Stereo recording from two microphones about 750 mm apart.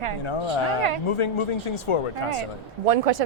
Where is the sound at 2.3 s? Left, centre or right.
Right.